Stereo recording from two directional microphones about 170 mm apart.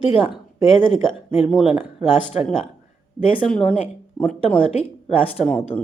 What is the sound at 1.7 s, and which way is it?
Speech, 5° right (ahead or behind).